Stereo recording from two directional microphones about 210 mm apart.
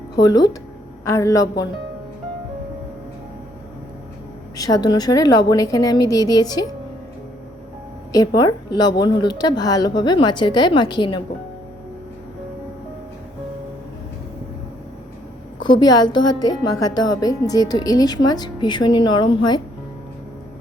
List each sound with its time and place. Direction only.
0.2 s a woman's voice: 20° left (ahead or behind)
4.5 s a woman's voice: 15° left (ahead or behind)
8.4 s speech: 20° left (ahead or behind)
15.8 s speech: 20° left (ahead or behind)